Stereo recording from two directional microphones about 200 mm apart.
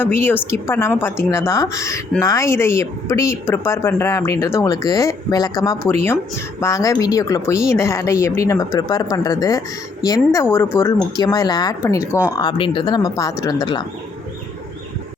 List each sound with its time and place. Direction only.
0.0 s a woman's voice: 10° left (ahead or behind)